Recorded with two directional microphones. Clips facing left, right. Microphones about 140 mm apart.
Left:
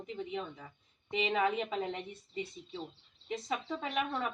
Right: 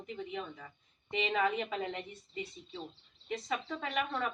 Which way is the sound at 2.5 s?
25° left (ahead or behind).